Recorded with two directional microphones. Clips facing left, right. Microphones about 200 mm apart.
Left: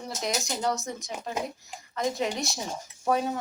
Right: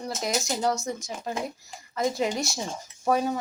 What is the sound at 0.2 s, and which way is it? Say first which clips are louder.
Speech: right 2 dB; centre (ahead or behind).